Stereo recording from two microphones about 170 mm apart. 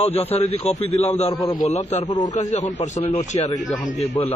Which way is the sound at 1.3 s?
25° left (ahead or behind).